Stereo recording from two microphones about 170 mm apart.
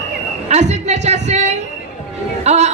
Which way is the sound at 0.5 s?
40° right (ahead or behind).